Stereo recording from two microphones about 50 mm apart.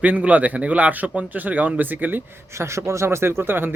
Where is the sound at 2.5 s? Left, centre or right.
Right.